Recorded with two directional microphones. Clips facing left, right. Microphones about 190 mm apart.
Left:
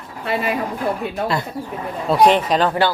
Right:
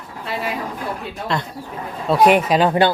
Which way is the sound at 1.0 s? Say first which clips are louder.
Left 6 dB; 55° left (ahead or behind).